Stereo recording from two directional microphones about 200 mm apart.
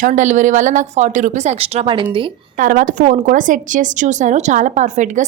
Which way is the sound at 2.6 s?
45° right (ahead or behind).